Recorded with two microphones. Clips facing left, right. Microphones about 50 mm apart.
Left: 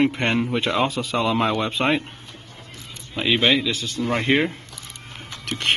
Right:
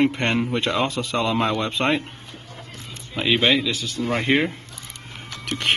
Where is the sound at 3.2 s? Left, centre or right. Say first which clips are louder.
Even; centre.